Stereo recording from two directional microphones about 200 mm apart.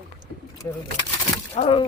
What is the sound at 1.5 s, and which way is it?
Speech, 25° left (ahead or behind).